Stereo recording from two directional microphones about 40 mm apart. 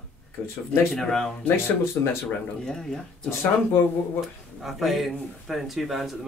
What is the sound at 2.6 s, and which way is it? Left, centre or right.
Speech, centre.